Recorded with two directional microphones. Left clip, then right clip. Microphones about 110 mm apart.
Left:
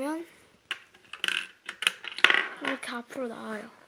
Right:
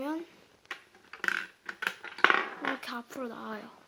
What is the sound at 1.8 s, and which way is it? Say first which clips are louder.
Coin: left 3 dB; 10° left (ahead or behind).